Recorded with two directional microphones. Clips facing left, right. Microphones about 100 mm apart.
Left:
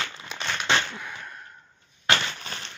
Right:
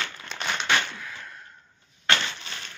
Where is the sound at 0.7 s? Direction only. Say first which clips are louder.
Left 2 dB; 15° left (ahead or behind).